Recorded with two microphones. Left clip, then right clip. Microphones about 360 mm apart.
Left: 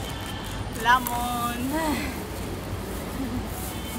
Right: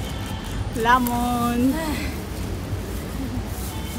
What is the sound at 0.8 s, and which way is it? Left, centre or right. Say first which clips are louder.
Speech: right 3 dB; centre.